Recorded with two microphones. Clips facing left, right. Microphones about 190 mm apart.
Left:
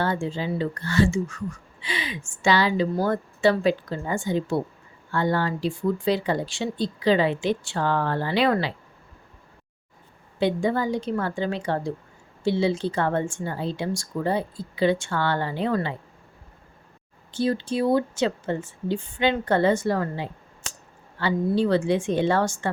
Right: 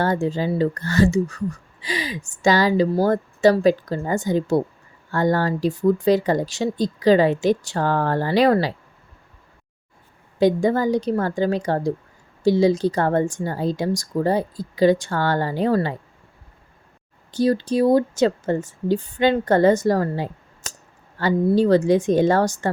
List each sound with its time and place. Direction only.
0.0 s speech: 40° right (ahead or behind)
10.4 s speech: 40° right (ahead or behind)
17.3 s speech: 40° right (ahead or behind)